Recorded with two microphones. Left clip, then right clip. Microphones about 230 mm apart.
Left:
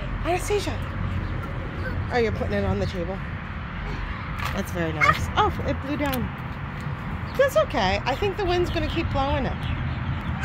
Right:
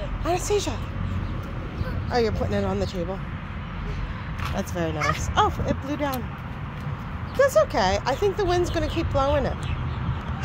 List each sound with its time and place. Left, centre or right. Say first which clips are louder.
0.3 s speech: right 1 dB; centre
2.1 s speech: even; centre
4.6 s speech: left 3 dB; centre
7.3 s speech: right 1 dB; centre